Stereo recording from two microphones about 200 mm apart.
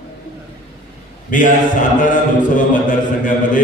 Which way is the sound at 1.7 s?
40° left (ahead or behind).